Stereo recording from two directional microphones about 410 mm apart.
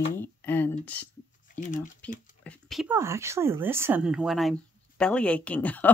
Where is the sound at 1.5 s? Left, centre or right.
Centre.